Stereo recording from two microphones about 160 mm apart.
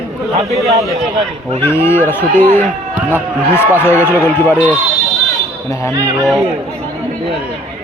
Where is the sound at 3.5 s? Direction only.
15° left (ahead or behind).